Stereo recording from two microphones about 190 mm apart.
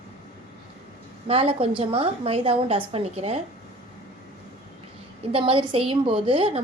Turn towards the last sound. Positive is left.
turn(degrees=-30)  # may be behind; listen again after turning